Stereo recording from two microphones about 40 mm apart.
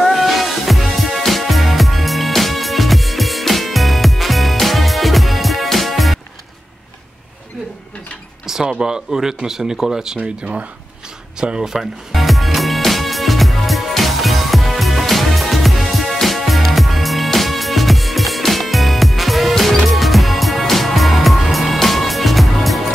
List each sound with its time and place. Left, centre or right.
0.0 s music: centre
8.5 s speech: centre
10.1 s speech: right
11.6 s music: centre